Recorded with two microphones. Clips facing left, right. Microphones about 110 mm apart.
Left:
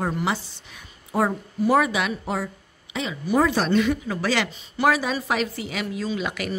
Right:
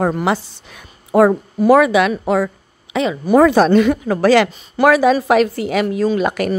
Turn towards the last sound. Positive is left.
turn(degrees=-50)  # may be behind; listen again after turning